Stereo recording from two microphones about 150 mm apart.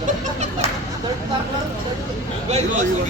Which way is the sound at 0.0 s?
50° right (ahead or behind).